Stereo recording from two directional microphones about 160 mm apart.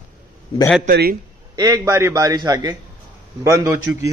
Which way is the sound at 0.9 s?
75° right (ahead or behind).